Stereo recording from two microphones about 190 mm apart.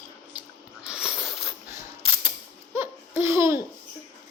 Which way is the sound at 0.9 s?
5° right (ahead or behind).